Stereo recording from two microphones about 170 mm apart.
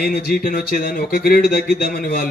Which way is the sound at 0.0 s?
60° left (ahead or behind).